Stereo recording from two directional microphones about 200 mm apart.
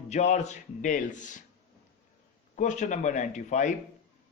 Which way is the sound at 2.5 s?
40° left (ahead or behind).